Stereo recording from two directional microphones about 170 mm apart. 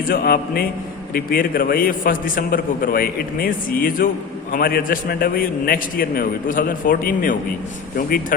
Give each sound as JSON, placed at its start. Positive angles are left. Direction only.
{"t": 0.1, "sound": "a man's voice", "side_deg": 60}